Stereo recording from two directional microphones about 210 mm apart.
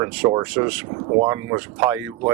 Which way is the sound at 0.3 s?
15° right (ahead or behind).